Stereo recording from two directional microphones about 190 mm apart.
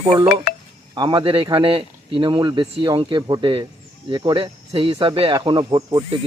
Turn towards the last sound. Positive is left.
turn(degrees=-20)  # may be behind; listen again after turning